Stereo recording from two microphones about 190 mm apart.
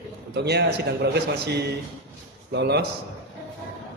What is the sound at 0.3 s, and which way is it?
A man's voice, 65° right (ahead or behind).